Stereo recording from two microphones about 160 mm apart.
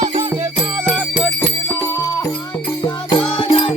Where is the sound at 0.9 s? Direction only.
Centre (ahead or behind).